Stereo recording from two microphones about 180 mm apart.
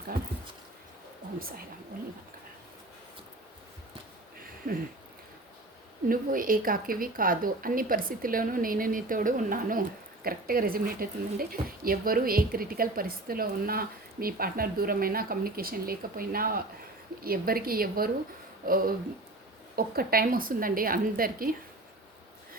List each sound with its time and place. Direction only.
1.4 s speech: 55° right (ahead or behind)
4.7 s speech: 50° right (ahead or behind)
6.1 s speech: 50° right (ahead or behind)